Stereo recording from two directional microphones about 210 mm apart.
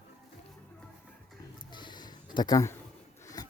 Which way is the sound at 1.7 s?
20° left (ahead or behind).